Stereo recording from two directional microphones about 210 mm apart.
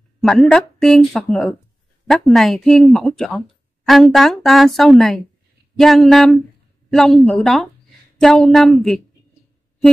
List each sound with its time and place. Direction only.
0.2 s speech: centre (ahead or behind)